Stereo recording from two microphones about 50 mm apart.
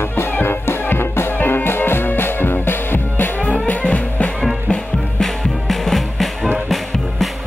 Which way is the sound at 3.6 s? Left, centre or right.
Left.